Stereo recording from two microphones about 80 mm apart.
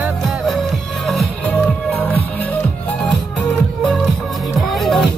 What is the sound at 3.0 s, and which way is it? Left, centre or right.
Music, centre.